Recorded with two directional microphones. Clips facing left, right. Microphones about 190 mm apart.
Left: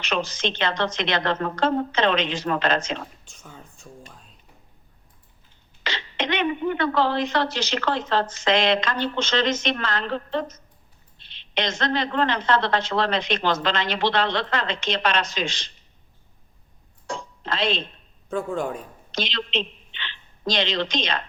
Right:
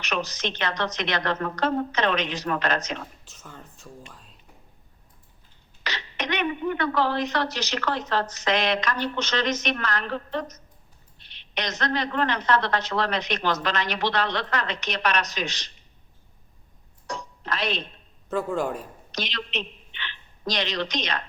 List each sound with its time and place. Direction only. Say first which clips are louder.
0.0 s a woman's voice: left 3 dB; 25° left (ahead or behind)
3.2 s speech: even; centre (ahead or behind)
5.8 s a woman's voice: left 4 dB; 25° left (ahead or behind)
17.1 s a sound: left 2 dB; 25° left (ahead or behind)
18.5 s speech: even; 5° right (ahead or behind)
19.1 s a woman's voice: left 4 dB; 25° left (ahead or behind)